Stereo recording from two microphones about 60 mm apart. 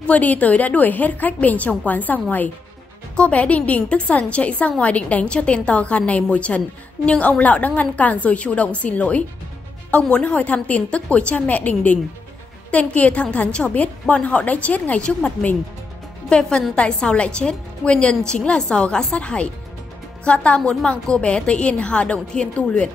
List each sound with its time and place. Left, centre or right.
0.0 s a woman's voice: left